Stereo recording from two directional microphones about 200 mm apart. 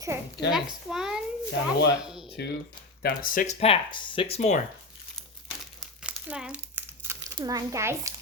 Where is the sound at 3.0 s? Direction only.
50° left (ahead or behind); by 4.6 s 35° left (ahead or behind).